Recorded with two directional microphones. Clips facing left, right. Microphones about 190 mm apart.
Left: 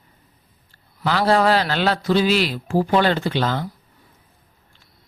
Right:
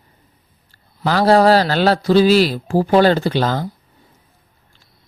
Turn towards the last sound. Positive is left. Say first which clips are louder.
# right 4 dB
turn(degrees=-40)  # may be behind; listen again after turning